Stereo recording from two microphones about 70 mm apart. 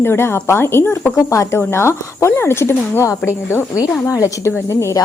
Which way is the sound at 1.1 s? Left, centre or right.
Left.